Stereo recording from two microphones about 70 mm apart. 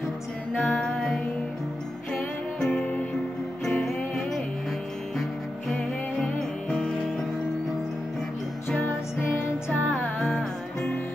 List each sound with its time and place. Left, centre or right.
0.7 s music: centre
5.7 s music: centre
8.6 s music: left
9.8 s music: centre